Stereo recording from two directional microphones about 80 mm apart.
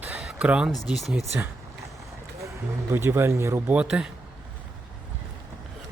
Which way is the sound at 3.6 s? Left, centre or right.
Centre.